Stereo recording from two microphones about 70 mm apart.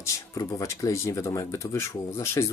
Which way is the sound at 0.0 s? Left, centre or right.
Left.